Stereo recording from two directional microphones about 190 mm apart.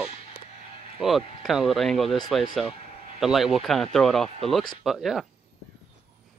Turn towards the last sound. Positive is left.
turn(degrees=0)  # may be behind; listen again after turning